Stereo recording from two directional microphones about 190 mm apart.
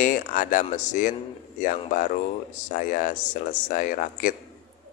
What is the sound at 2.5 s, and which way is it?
Speech, 45° left (ahead or behind).